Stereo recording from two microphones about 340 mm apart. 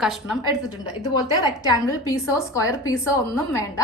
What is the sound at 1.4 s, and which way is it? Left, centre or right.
A woman's voice, centre.